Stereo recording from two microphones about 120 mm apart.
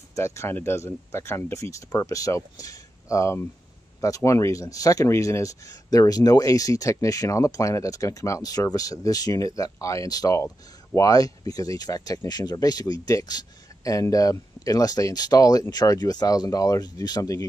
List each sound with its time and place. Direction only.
0.1 s speech: 25° left (ahead or behind)